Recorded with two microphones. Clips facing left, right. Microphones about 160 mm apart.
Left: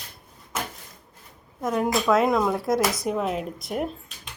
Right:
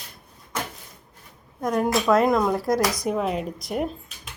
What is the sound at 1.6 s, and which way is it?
Speech, centre (ahead or behind).